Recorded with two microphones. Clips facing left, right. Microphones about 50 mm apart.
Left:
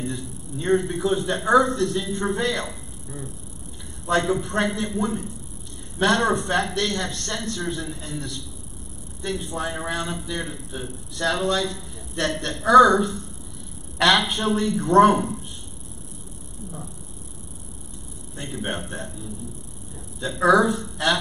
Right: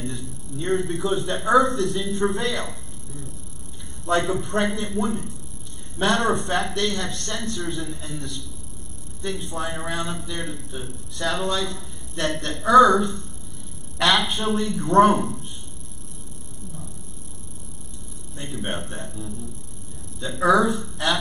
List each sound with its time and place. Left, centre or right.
0.0 s a man's voice: centre
4.0 s a man's voice: centre
6.2 s a man's voice: centre
14.2 s a man's voice: centre
18.4 s a man's voice: centre